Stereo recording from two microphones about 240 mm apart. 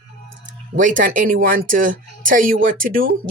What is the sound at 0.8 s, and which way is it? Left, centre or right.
Speech, right.